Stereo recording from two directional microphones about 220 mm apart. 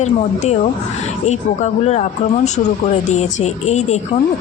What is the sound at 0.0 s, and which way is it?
A woman's voice, 30° left (ahead or behind).